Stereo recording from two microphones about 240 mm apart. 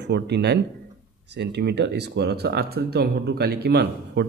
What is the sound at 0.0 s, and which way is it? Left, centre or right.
Speech, right.